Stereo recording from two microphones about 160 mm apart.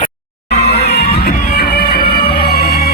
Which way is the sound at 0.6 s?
85° left.